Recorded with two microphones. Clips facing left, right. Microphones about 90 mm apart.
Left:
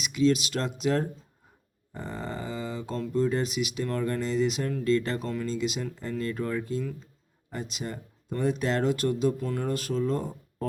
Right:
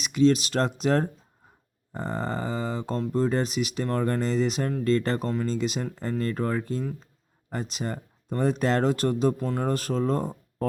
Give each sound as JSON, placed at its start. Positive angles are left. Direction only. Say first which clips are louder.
{"t": 0.0, "sound": "speech", "louder": "right 3 dB", "side_deg": -40}